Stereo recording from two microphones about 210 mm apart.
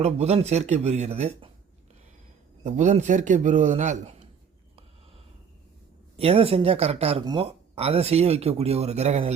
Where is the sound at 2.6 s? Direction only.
35° right (ahead or behind).